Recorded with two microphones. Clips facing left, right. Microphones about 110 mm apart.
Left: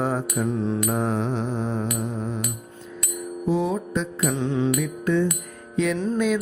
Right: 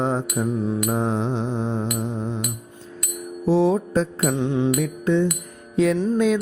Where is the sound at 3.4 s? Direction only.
30° right (ahead or behind).